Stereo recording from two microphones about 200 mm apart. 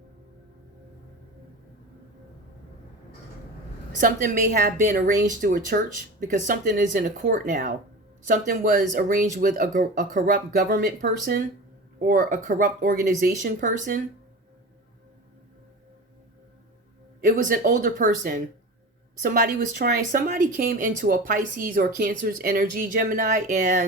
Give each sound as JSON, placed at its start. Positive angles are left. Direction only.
{"t": 4.6, "sound": "a woman's voice", "side_deg": -40}
{"t": 17.2, "sound": "speech", "side_deg": -45}